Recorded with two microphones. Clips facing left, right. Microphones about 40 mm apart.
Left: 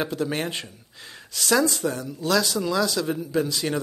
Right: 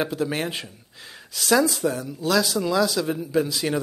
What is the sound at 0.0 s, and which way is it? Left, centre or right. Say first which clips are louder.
Speech: right 1 dB; centre.